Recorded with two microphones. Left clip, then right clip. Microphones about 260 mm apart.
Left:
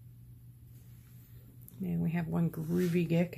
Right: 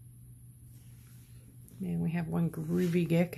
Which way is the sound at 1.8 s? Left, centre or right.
Centre.